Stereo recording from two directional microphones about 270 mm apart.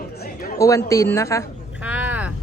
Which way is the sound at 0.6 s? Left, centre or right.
Centre.